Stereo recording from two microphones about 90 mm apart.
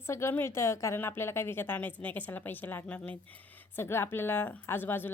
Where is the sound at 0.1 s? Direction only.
30° left (ahead or behind).